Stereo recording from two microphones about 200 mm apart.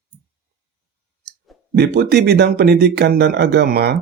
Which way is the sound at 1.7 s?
55° right (ahead or behind).